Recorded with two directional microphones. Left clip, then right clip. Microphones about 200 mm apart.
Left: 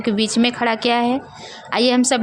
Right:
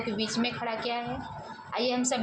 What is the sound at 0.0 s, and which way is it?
Speech, 45° left (ahead or behind).